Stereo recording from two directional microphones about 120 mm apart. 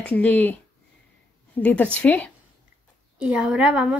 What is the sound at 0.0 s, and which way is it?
A woman's voice, 10° left (ahead or behind).